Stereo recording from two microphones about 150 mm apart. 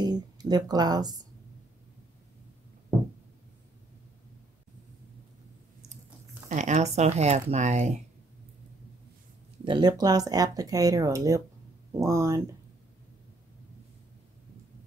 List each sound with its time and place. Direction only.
0.0 s speech: 25° right (ahead or behind)
6.5 s speech: 50° right (ahead or behind)
9.7 s speech: 30° right (ahead or behind)